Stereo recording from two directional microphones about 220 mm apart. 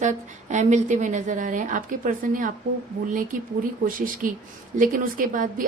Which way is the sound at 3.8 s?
40° right (ahead or behind).